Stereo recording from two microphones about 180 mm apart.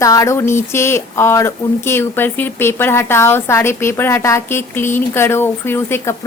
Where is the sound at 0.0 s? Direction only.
20° left (ahead or behind).